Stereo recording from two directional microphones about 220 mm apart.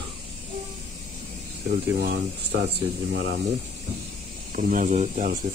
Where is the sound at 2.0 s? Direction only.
50° right (ahead or behind).